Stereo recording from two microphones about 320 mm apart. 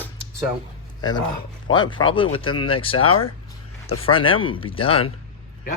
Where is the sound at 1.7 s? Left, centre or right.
Centre.